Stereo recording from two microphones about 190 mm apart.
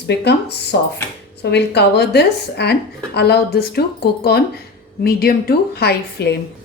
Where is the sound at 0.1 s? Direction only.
65° left (ahead or behind).